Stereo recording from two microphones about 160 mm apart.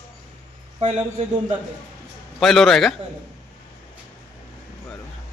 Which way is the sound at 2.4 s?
Centre (ahead or behind).